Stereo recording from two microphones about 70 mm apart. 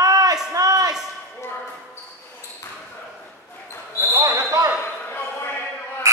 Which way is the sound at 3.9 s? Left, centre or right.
Right.